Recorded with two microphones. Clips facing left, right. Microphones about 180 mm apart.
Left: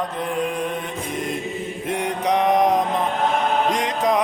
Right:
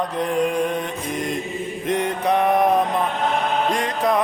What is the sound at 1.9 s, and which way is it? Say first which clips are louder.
Mantra: right 1 dB; 10° left (ahead or behind).